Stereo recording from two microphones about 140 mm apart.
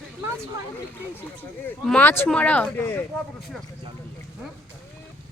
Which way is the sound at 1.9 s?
15° left (ahead or behind).